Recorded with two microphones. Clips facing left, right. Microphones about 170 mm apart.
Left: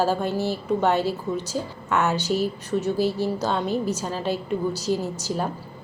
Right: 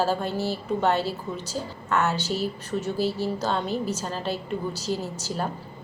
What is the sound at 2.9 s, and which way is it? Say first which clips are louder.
Speech: left 2 dB; 45° left (ahead or behind).